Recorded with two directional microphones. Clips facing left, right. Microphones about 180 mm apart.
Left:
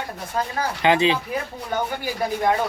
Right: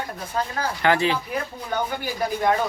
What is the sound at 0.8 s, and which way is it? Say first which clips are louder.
Speech: left 2 dB; 20° left (ahead or behind).